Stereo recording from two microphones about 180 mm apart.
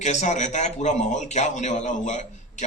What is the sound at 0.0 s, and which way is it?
A man's voice, 40° left (ahead or behind).